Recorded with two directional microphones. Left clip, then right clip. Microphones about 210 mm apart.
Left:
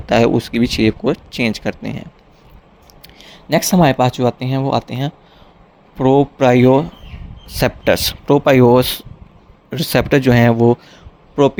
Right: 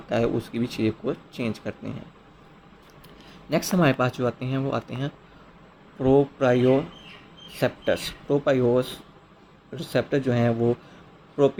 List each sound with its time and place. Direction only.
0.1 s speech: 40° left (ahead or behind)
3.2 s speech: 40° left (ahead or behind)